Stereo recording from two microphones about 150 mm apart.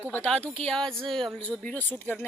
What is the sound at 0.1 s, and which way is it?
Speech, 10° left (ahead or behind).